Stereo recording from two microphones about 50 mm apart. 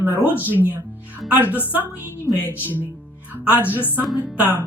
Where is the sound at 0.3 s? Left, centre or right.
Right.